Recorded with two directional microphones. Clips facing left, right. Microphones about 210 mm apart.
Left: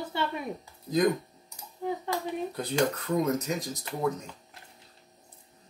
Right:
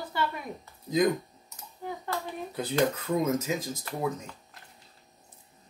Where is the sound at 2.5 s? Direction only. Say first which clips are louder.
Right 3 dB; centre (ahead or behind).